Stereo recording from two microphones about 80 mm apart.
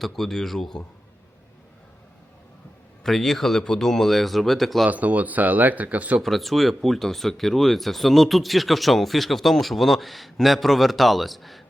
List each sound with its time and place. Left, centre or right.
0.0 s speech: centre
3.0 s speech: centre
4.9 s speech: centre
6.1 s speech: centre